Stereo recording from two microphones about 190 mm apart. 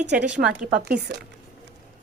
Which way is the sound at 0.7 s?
55° right (ahead or behind).